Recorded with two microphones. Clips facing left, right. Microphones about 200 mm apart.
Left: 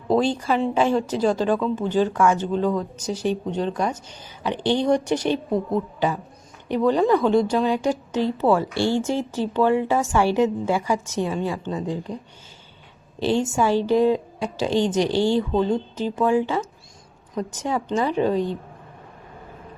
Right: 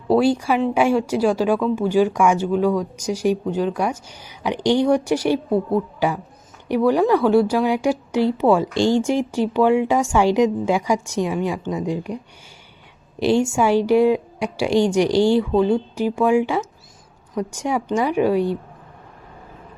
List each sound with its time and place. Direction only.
0.1 s speech: 10° right (ahead or behind)